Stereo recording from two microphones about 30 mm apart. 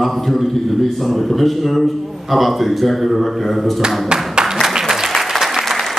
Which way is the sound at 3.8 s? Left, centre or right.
Right.